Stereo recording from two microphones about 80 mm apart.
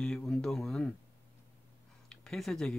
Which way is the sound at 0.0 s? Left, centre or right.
Centre.